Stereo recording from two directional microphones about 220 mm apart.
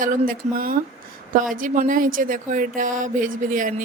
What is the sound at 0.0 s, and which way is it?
Speech, 40° right (ahead or behind).